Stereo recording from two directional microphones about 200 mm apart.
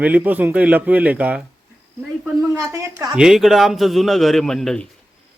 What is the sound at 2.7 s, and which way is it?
Speech, 20° right (ahead or behind).